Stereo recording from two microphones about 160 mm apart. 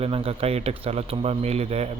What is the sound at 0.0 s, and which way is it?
A man's voice, 35° right (ahead or behind).